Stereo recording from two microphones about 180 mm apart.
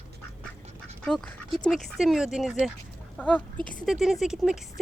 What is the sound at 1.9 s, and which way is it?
Speech, centre (ahead or behind).